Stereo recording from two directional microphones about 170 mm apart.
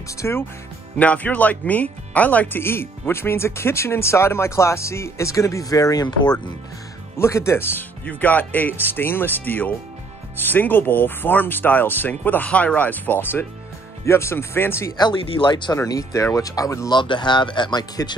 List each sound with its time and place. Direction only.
0.2 s speech: 15° left (ahead or behind)
15.0 s speech: 30° left (ahead or behind)